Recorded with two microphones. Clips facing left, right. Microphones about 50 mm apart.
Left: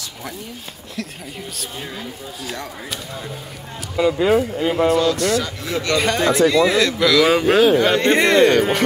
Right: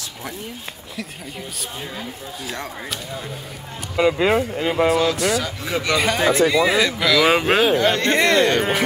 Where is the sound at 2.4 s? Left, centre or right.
Centre.